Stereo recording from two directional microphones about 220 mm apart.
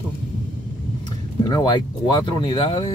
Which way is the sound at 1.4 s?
15° left (ahead or behind).